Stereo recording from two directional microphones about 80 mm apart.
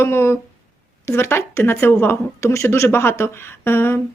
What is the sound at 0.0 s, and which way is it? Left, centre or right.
A woman's voice, left.